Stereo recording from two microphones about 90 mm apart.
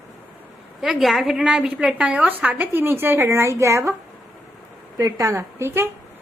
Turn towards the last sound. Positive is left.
turn(degrees=-30)  # may be behind; listen again after turning